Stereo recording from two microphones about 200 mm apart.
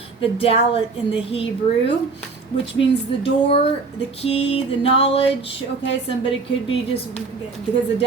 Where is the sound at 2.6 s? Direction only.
60° left (ahead or behind).